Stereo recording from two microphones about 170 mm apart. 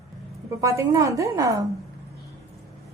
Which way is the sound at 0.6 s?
20° right (ahead or behind).